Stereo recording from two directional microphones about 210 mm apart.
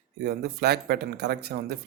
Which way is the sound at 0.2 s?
50° right (ahead or behind).